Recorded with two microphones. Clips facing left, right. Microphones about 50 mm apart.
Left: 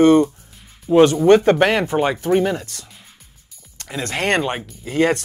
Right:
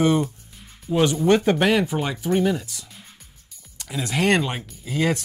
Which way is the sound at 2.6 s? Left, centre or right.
Left.